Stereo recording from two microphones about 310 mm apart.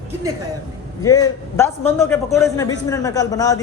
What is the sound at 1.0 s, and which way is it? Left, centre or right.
A man's voice, centre.